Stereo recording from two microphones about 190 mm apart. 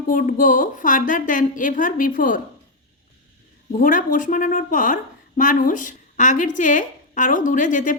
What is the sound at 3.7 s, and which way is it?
A woman's voice, 45° left (ahead or behind).